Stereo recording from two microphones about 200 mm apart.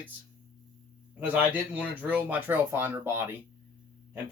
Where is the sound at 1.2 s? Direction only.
10° right (ahead or behind).